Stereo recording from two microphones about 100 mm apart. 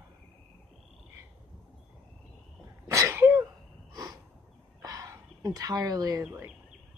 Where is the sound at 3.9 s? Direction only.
35° right (ahead or behind).